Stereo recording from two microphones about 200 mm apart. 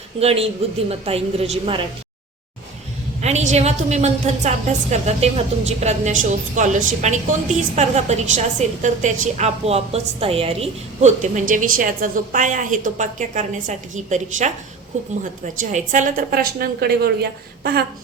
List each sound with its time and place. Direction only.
0.2 s a woman's voice: 30° right (ahead or behind)
3.2 s a woman's voice: 35° right (ahead or behind)
15.7 s a woman's voice: 40° right (ahead or behind)